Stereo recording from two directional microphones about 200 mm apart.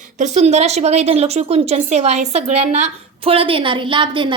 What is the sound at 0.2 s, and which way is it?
A woman's voice, 35° right (ahead or behind).